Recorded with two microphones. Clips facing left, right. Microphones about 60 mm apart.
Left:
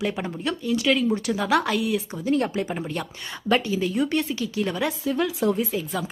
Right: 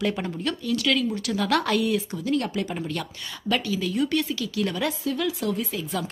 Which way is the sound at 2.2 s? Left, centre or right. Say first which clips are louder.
Left 6 dB; left.